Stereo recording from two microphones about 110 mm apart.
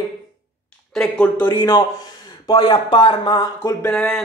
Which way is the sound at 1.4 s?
25° left (ahead or behind).